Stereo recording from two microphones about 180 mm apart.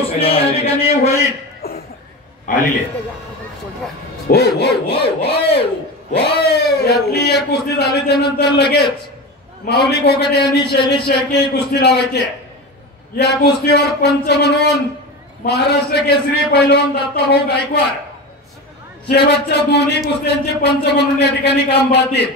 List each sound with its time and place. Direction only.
0.2 s speech: 35° left (ahead or behind)
1.6 s a sound: 55° left (ahead or behind)
4.3 s a man's voice: 65° left (ahead or behind)
13.2 s a man's voice: 65° left (ahead or behind)
19.0 s a man's voice: 70° left (ahead or behind)